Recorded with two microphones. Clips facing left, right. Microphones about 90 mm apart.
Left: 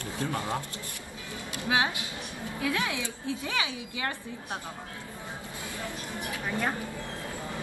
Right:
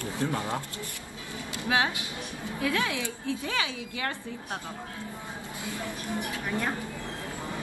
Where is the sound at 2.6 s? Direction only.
20° left (ahead or behind).